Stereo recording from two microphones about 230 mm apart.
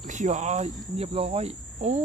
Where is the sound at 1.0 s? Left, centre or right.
Right.